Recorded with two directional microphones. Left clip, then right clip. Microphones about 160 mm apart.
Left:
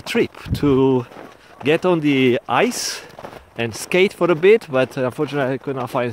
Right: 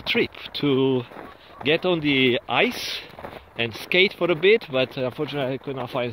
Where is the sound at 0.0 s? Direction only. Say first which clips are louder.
Left 3 dB; 50° left (ahead or behind).